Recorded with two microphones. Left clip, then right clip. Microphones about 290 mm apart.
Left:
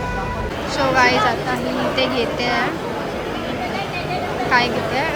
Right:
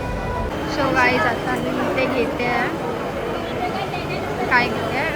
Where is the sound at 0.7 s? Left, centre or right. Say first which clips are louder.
Left 2 dB; centre.